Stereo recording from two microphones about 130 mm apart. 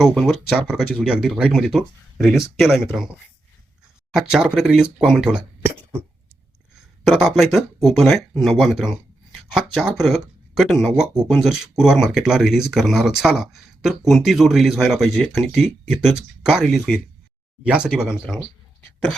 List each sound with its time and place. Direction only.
0.0 s speech: centre (ahead or behind)
4.1 s speech: 5° right (ahead or behind)
7.0 s speech: 5° right (ahead or behind)